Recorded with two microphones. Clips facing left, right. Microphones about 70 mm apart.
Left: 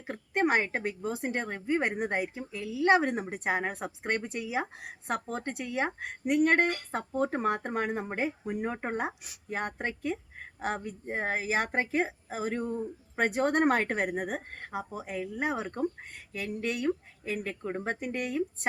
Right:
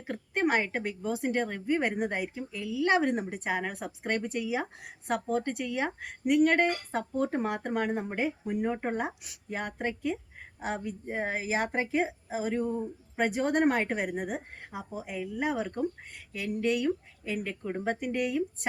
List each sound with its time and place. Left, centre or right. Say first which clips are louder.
0.1 s a woman's voice: left 1 dB; left
9.5 s a woman's voice: even; left